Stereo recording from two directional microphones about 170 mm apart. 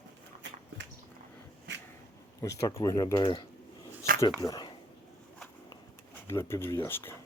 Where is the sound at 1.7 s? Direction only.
90° right.